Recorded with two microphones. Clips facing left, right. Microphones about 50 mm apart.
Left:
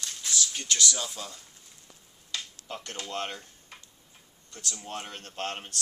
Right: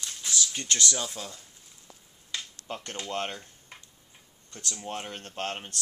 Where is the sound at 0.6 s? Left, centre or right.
Right.